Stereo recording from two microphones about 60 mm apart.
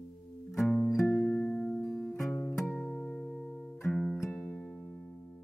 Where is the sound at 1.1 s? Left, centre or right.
Left; by 4.1 s centre.